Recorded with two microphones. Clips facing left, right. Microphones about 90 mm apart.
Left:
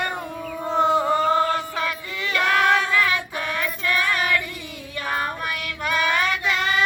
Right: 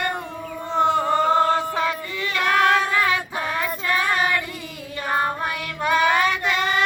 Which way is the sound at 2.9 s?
25° right (ahead or behind).